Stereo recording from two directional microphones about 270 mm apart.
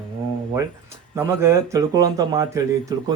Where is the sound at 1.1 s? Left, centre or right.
Centre.